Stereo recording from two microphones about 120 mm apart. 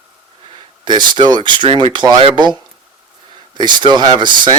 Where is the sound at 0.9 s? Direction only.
40° right (ahead or behind).